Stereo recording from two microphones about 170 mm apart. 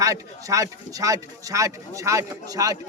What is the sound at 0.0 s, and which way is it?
Speech, 20° right (ahead or behind).